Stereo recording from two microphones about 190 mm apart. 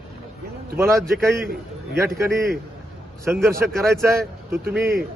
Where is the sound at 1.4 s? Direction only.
50° right (ahead or behind).